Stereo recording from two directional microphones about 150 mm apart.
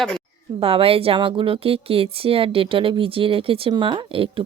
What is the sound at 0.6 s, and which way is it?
Speech, 40° right (ahead or behind).